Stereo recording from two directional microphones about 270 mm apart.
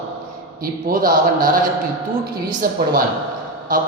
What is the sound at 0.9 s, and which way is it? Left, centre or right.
Speech, right.